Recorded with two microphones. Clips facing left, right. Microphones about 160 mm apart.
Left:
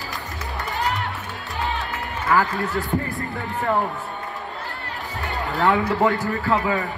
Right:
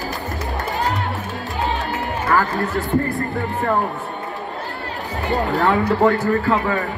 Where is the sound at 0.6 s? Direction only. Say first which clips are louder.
Right 2 dB; 40° right (ahead or behind).